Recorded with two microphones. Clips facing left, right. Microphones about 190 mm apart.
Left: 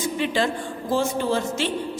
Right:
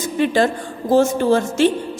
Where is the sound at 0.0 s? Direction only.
45° right (ahead or behind).